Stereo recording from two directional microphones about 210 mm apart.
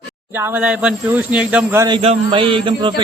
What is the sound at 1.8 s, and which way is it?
Speech, 25° right (ahead or behind).